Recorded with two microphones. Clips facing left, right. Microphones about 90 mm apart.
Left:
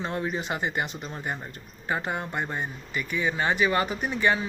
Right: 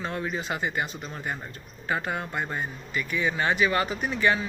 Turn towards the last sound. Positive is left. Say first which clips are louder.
# even
turn(degrees=20)  # may be behind; listen again after turning